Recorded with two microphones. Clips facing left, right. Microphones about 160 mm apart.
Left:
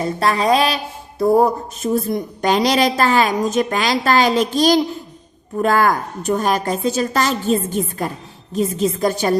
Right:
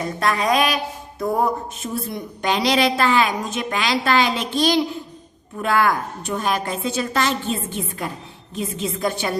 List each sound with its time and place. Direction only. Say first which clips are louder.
0.0 s a woman's voice: left 4 dB; 30° left (ahead or behind)